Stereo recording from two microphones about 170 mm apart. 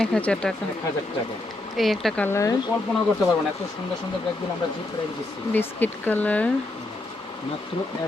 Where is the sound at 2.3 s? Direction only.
15° left (ahead or behind).